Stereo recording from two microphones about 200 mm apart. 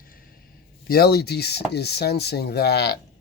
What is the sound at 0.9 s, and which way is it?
Speech, 50° left (ahead or behind).